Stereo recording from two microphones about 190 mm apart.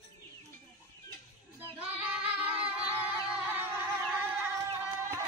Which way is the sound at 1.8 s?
10° right (ahead or behind).